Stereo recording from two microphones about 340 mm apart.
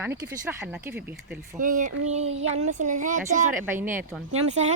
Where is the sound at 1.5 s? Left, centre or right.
Right.